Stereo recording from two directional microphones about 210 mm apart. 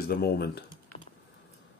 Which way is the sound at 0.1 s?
45° left (ahead or behind).